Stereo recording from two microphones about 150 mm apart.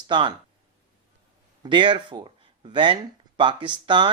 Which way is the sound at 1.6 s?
30° right (ahead or behind).